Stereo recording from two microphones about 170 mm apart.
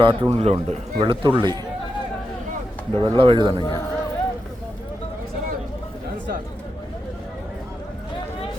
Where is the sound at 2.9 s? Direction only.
30° right (ahead or behind).